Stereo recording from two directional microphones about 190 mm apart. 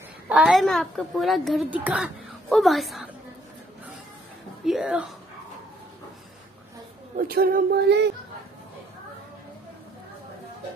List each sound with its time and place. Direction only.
0.3 s a woman's voice: centre (ahead or behind)
4.6 s a woman's voice: centre (ahead or behind)
7.2 s a sound: 50° right (ahead or behind)